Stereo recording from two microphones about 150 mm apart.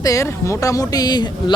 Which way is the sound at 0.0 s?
20° left (ahead or behind).